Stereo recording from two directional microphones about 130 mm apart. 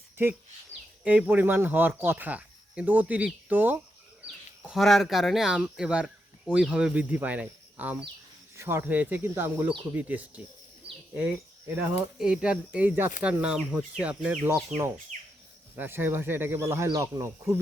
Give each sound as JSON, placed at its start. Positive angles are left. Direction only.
{"t": 1.0, "sound": "speech", "side_deg": -10}
{"t": 4.6, "sound": "speech", "side_deg": 0}
{"t": 11.8, "sound": "speech", "side_deg": -5}
{"t": 15.7, "sound": "speech", "side_deg": -15}